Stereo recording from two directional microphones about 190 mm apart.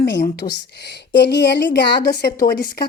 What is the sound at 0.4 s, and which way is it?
Speech, 35° left (ahead or behind).